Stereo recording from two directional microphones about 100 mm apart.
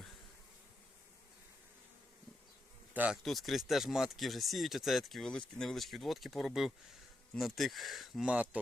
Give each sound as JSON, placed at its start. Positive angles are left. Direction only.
{"t": 2.9, "sound": "speech", "side_deg": -15}
{"t": 3.2, "sound": "speech", "side_deg": 0}